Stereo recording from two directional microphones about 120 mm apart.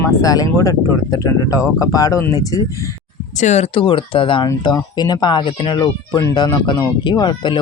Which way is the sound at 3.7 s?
50° left (ahead or behind).